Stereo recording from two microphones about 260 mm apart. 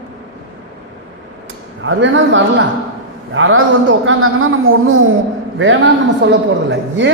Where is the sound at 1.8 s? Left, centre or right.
Right.